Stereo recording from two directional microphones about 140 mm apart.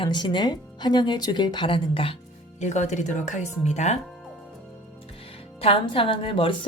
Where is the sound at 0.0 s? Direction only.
35° left (ahead or behind).